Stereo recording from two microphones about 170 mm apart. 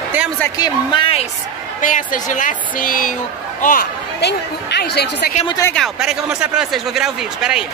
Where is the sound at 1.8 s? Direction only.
50° left (ahead or behind).